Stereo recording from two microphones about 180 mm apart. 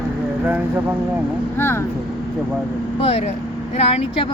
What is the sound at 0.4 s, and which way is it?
Speech, 10° right (ahead or behind).